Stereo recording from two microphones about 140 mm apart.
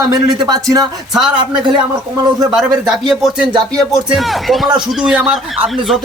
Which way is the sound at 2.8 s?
Centre (ahead or behind).